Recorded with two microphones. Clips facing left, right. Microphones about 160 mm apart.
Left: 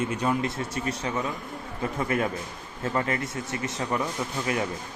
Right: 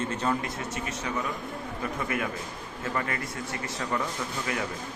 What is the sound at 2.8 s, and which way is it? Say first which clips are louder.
Speech: left 4 dB; 25° left (ahead or behind).